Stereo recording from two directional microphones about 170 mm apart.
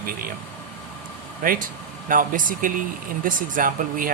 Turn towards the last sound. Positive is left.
turn(degrees=-55)  # may be behind; listen again after turning